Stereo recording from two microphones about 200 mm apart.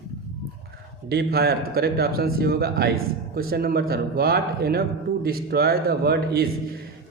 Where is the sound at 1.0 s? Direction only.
50° right (ahead or behind).